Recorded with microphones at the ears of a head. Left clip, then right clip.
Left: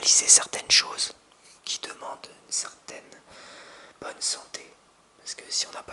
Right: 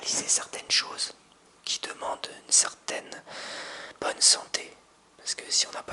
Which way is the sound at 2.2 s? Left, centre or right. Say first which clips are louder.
Right 8 dB; right.